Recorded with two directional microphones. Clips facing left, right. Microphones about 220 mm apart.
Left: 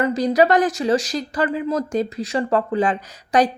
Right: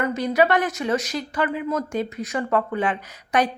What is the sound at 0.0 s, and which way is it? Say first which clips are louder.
Speech: left 3 dB; 35° left (ahead or behind).